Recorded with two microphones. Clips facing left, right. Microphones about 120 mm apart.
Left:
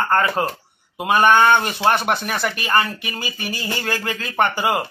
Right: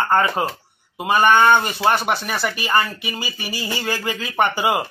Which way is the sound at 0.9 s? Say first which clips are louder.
Left 1 dB; centre (ahead or behind).